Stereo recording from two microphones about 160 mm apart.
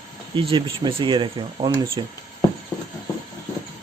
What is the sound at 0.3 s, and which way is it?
Speech, 35° right (ahead or behind).